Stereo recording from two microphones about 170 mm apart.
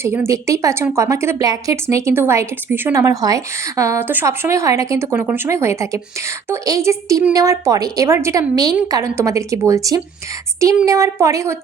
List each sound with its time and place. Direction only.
0.0 s a woman's voice: 15° right (ahead or behind)